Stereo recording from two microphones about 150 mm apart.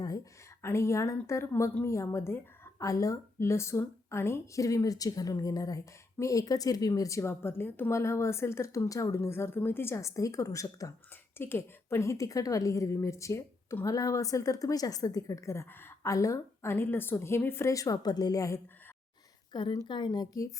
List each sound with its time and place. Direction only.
0.6 s a woman's voice: 20° left (ahead or behind)